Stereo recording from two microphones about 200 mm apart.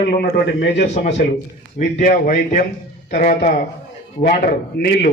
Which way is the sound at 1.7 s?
45° left (ahead or behind).